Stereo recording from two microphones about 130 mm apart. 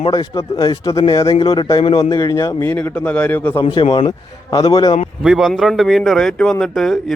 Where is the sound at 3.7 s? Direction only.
45° left (ahead or behind).